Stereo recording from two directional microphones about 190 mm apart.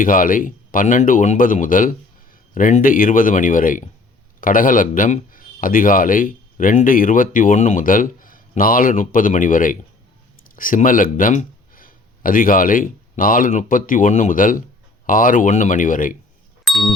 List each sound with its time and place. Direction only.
0.0 s a man's voice: 45° left (ahead or behind)
16.6 s ding: centre (ahead or behind)